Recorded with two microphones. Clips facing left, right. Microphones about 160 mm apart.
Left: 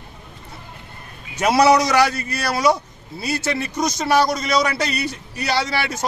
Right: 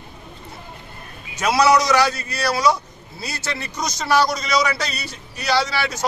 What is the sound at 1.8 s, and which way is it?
A man's voice, 55° left (ahead or behind).